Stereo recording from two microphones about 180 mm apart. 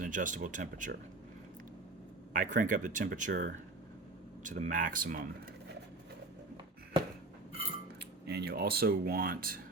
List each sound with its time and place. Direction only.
0.0 s speech: 45° right (ahead or behind)
2.3 s speech: 50° right (ahead or behind)
8.3 s speech: 65° right (ahead or behind)